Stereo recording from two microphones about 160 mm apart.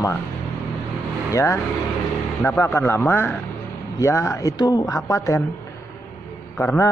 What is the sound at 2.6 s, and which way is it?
A man's voice, 15° left (ahead or behind).